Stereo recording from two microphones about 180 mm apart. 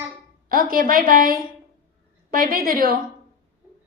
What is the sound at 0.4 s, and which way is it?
A woman's voice, 50° right (ahead or behind).